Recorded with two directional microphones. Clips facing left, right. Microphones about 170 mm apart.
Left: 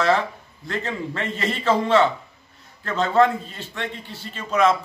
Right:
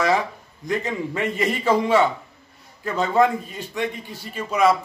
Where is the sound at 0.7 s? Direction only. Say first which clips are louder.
Right 3 dB; 10° right (ahead or behind).